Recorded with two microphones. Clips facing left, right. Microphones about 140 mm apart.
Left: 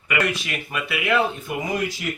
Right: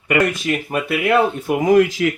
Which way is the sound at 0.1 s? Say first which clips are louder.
Right 7 dB; 45° right (ahead or behind).